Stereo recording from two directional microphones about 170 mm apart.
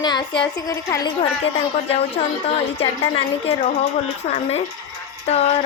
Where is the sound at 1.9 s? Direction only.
35° left (ahead or behind).